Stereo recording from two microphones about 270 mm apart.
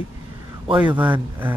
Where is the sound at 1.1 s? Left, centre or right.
Centre.